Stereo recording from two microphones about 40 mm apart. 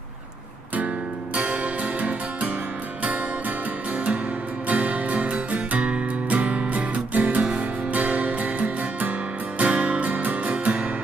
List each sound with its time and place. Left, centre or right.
1.3 s music: right
4.6 s music: right